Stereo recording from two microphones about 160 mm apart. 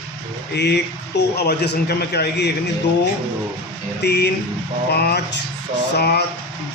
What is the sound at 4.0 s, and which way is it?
Speech, 90° left.